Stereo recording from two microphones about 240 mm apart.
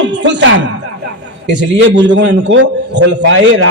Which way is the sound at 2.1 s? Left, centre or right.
Right.